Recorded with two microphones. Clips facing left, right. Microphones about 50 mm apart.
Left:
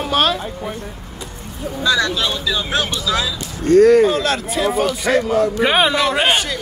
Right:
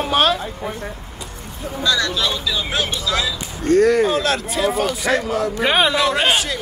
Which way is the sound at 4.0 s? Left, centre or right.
Centre.